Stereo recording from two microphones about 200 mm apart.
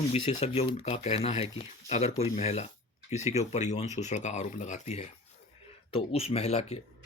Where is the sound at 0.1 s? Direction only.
30° left (ahead or behind).